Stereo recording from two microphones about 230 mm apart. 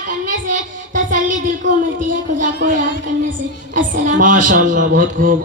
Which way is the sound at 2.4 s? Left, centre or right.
Right.